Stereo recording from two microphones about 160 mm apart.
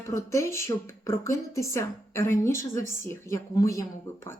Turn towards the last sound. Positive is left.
turn(degrees=20)  # may be behind; listen again after turning